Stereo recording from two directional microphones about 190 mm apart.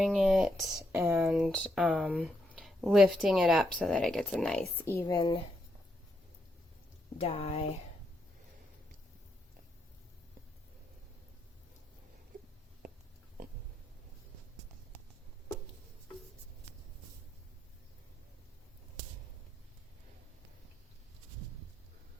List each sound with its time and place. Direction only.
0.0 s speech: centre (ahead or behind); by 5.4 s 20° left (ahead or behind)
7.2 s speech: 35° left (ahead or behind)